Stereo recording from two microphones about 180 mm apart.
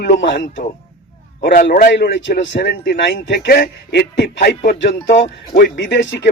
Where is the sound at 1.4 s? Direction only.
50° left (ahead or behind); by 4.5 s 70° left (ahead or behind).